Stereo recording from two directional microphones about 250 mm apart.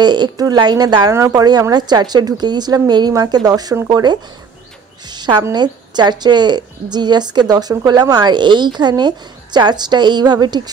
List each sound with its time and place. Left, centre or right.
0.0 s a woman's voice: centre